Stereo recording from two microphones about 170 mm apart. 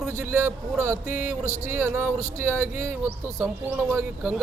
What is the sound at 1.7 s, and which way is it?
Speech, 15° right (ahead or behind).